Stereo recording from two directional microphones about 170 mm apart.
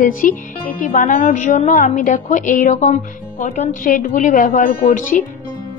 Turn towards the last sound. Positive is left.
turn(degrees=50)  # may be behind; listen again after turning